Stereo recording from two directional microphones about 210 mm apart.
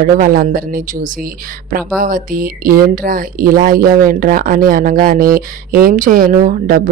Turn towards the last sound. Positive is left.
turn(degrees=-40)  # may be behind; listen again after turning